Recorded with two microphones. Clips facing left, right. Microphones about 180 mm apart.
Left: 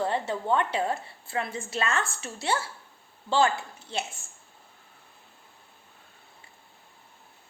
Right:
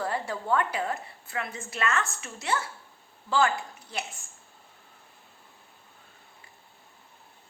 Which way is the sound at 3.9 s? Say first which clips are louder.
Left 3 dB; 25° left (ahead or behind).